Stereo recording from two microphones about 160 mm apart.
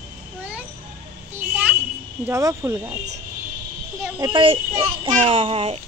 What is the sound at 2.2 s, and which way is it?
Speech, 15° right (ahead or behind).